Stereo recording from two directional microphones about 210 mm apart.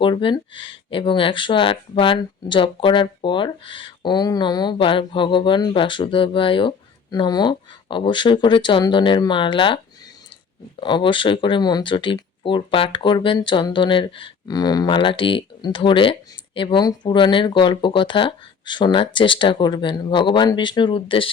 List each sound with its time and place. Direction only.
0.0 s speech: 25° left (ahead or behind)